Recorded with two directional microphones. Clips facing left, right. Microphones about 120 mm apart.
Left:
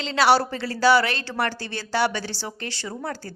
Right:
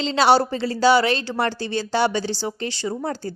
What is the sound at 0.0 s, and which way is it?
A woman's voice, 25° right (ahead or behind).